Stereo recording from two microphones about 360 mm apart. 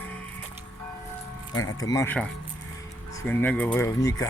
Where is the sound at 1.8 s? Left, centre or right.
Centre.